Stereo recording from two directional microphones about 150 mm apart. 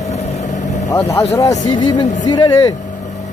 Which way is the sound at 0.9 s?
20° left (ahead or behind).